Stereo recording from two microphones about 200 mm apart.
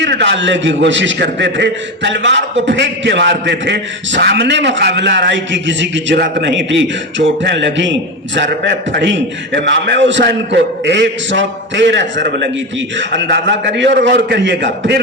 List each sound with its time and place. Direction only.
0.0 s a man's voice: 60° right (ahead or behind)